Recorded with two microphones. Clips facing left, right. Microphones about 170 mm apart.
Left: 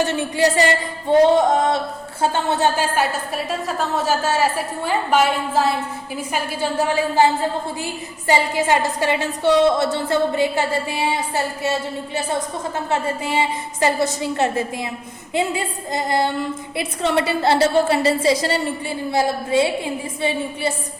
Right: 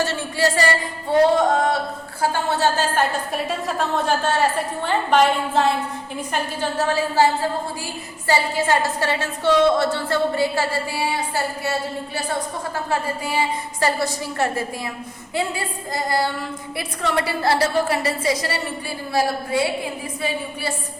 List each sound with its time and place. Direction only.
0.0 s a woman's voice: 15° left (ahead or behind)
2.9 s a woman's voice: 5° left (ahead or behind)
8.3 s a woman's voice: 20° left (ahead or behind)
12.7 s a woman's voice: 20° left (ahead or behind)